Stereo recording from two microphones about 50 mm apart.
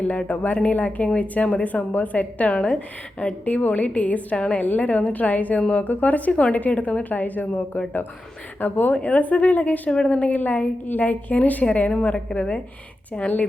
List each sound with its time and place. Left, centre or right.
0.0 s a woman's voice: left
5.8 s a woman's voice: left
9.0 s a woman's voice: left